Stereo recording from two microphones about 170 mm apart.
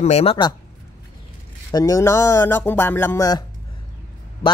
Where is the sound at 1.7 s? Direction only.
20° left (ahead or behind).